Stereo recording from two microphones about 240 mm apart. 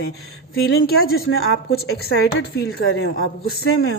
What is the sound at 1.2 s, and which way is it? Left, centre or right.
Speech, left.